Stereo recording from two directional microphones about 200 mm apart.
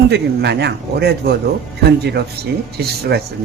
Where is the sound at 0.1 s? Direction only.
55° right (ahead or behind).